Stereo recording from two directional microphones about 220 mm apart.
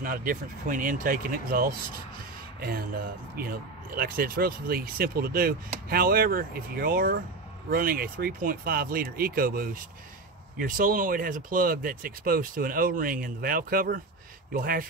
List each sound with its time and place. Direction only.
0.0 s speech: 40° right (ahead or behind)
3.3 s speech: 40° right (ahead or behind)